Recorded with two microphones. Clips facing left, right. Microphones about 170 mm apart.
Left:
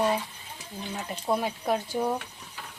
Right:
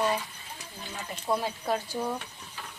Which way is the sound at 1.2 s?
20° left (ahead or behind).